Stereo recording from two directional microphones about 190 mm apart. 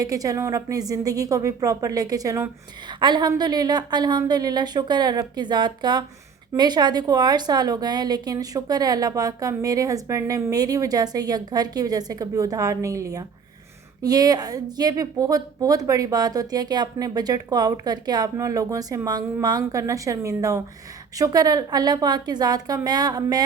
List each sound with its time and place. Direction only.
0.0 s a woman's voice: 20° right (ahead or behind)